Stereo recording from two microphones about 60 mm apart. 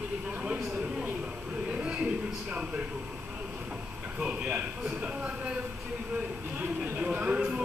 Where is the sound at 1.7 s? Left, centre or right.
Centre.